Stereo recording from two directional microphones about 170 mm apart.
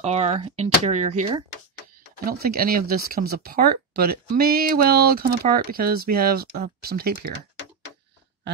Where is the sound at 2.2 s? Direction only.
60° right (ahead or behind).